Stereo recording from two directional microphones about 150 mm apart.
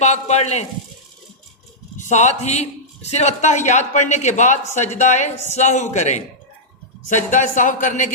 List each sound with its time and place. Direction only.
0.0 s a man's voice: 50° left (ahead or behind)
2.0 s a man's voice: 50° left (ahead or behind)